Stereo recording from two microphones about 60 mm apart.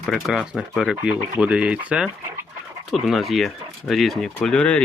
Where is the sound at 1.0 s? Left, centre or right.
Centre.